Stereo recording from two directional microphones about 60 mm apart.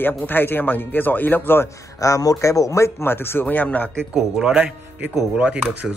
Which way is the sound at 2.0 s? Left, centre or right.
Left.